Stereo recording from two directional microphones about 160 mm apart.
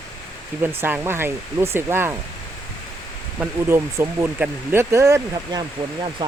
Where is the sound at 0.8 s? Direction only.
15° right (ahead or behind).